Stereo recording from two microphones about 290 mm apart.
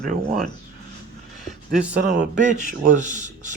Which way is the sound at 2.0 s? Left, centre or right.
Right.